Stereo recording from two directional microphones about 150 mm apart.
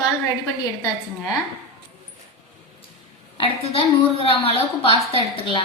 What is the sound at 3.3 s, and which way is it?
A woman's voice, 40° left (ahead or behind).